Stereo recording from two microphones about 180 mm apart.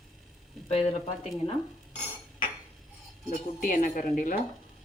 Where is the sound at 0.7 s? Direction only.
35° left (ahead or behind).